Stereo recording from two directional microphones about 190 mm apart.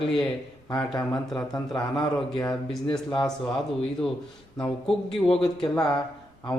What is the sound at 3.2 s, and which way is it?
Speech, 5° left (ahead or behind).